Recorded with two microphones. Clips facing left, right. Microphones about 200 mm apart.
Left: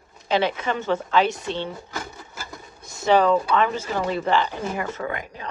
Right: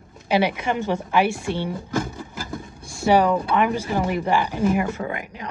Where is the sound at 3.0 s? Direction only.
15° right (ahead or behind).